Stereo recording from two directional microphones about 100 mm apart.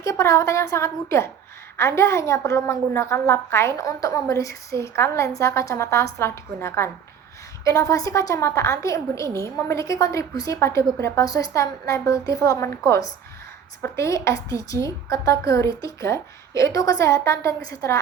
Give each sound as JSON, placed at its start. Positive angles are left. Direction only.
{"t": 0.0, "sound": "a woman's voice", "side_deg": 30}